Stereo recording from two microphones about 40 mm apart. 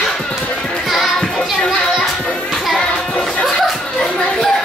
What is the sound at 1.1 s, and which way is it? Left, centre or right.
Children playing, centre.